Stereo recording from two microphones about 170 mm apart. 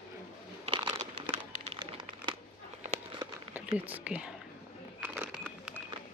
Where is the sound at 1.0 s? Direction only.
40° right (ahead or behind).